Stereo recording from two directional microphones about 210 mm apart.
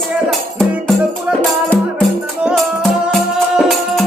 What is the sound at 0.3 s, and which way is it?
Music, centre (ahead or behind).